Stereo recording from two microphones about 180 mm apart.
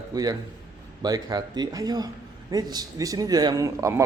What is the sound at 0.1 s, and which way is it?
A man's voice, 20° right (ahead or behind).